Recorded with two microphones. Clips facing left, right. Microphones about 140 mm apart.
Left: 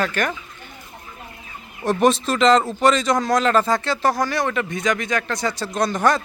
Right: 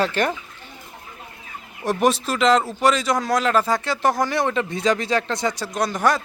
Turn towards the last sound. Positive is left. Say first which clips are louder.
# left 1 dB
turn(degrees=-10)  # may be behind; listen again after turning